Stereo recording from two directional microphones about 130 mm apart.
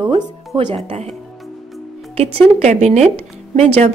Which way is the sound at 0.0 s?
40° right (ahead or behind).